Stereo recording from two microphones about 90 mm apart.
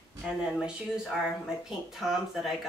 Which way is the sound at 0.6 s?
5° right (ahead or behind).